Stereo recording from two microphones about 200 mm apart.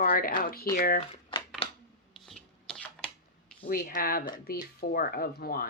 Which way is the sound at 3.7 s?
45° left (ahead or behind).